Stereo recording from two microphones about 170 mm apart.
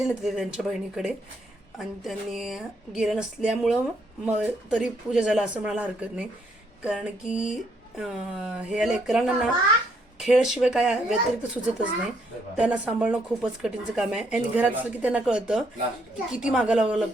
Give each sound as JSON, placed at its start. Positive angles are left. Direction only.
{"t": 0.0, "sound": "speech", "side_deg": 0}